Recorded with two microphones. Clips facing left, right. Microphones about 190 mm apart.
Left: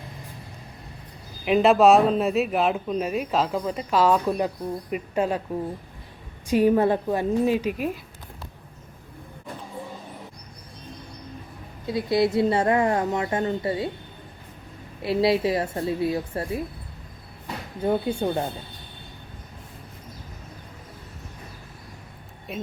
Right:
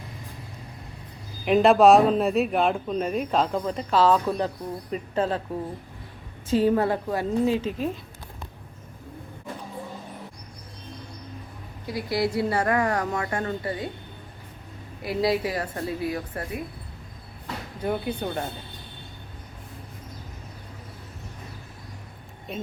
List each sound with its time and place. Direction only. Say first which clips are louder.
1.5 s speech: right 1 dB; centre (ahead or behind)
6.5 s a woman's voice: left 2 dB; 15° left (ahead or behind)
11.9 s a woman's voice: left 4 dB; 25° left (ahead or behind)
15.0 s a woman's voice: left 3 dB; 25° left (ahead or behind)
22.5 s speech: even; 5° left (ahead or behind)